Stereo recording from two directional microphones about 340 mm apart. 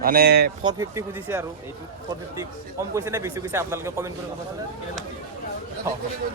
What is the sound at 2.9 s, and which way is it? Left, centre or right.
Speech, centre.